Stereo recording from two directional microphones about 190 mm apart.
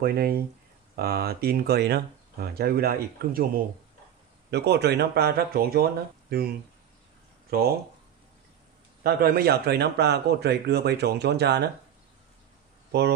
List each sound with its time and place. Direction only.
0.0 s speech: 55° right (ahead or behind)
7.5 s speech: 50° right (ahead or behind)
9.0 s speech: 55° right (ahead or behind)